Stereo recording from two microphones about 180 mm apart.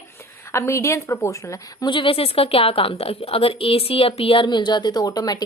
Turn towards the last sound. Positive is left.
turn(degrees=20)  # may be behind; listen again after turning